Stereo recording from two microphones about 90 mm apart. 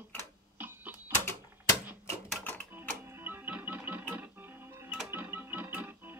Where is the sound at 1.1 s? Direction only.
25° left (ahead or behind).